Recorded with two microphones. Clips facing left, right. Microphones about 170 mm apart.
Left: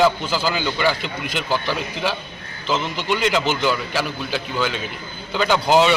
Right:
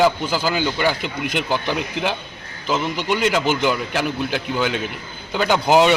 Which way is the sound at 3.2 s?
50° right (ahead or behind).